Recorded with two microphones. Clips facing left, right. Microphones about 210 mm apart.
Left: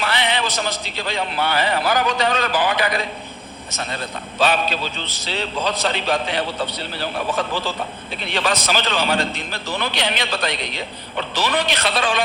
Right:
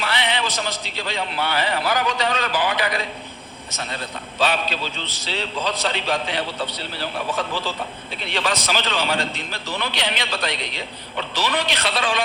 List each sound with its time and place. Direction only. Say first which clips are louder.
0.0 s a man's voice: left 2 dB; 45° left (ahead or behind)
4.4 s a man's voice: left 3 dB; 50° left (ahead or behind)